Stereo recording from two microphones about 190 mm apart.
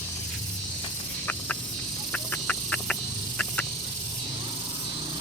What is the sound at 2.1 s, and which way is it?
Duck, 5° left (ahead or behind).